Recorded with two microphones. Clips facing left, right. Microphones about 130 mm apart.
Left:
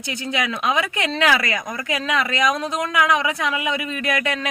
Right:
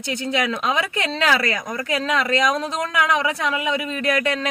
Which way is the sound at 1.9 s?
40° right (ahead or behind).